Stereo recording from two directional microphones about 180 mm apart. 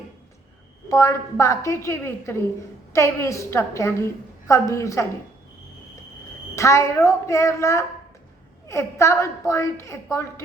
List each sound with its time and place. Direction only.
0.9 s a woman's voice: 15° left (ahead or behind)
6.6 s a woman's voice: 15° left (ahead or behind)